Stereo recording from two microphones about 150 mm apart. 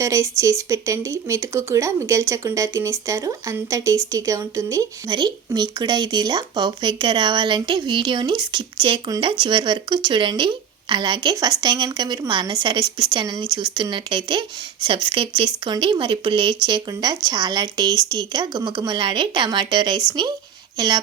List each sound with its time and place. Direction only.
0.0 s a woman's voice: 20° right (ahead or behind)